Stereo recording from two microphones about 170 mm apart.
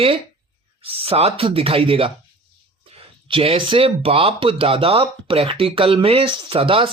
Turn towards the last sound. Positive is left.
turn(degrees=-30)  # may be behind; listen again after turning